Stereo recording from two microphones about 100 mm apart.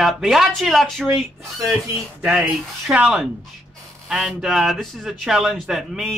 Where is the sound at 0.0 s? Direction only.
5° right (ahead or behind).